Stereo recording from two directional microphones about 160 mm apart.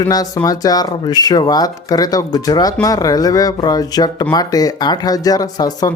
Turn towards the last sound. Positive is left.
turn(degrees=25)  # may be behind; listen again after turning